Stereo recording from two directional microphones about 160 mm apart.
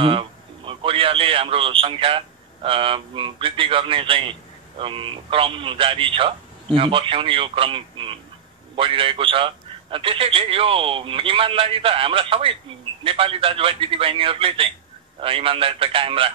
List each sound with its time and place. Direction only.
0.0 s a man's voice: 35° right (ahead or behind)